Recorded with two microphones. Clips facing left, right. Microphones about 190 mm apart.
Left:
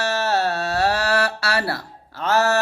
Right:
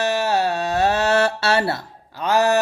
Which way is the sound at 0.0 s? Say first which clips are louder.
Right 2 dB; 15° right (ahead or behind).